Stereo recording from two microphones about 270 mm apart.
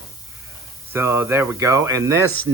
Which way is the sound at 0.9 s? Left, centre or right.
Centre.